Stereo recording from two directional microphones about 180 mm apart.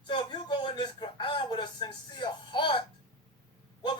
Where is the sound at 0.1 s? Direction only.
30° left (ahead or behind).